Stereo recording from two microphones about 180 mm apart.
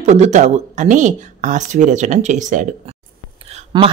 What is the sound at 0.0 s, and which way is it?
Speech, 40° right (ahead or behind).